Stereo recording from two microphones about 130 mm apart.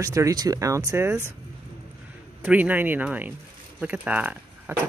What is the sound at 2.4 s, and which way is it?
Speech, 10° right (ahead or behind).